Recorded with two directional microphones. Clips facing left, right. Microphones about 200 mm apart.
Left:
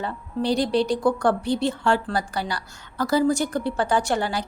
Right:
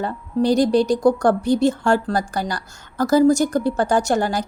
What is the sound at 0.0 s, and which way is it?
Speech, 45° right (ahead or behind).